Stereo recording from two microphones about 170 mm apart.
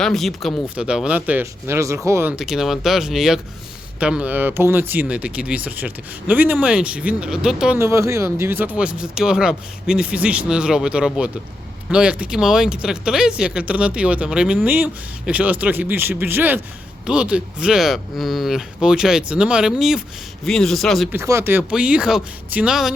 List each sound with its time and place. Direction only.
0.0 s speech: centre (ahead or behind); by 2.3 s 15° right (ahead or behind)
2.3 s speech: centre (ahead or behind)
7.8 s speech: 15° right (ahead or behind); by 21.1 s centre (ahead or behind)
21.1 s speech: 15° right (ahead or behind)